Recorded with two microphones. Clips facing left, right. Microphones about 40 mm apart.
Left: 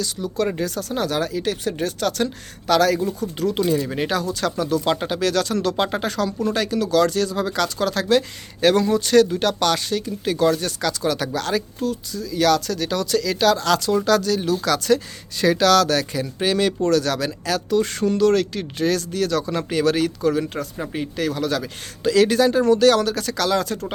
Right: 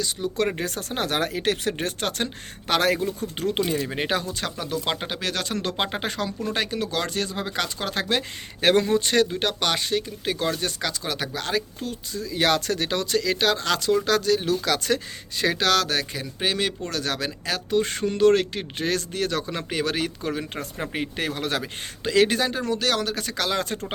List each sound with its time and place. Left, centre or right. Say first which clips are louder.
0.5 s speech: left 4 dB; right
2.0 s speech: left 5 dB; right
20.6 s speech: left 2 dB; right
21.6 s speech: left 6 dB; right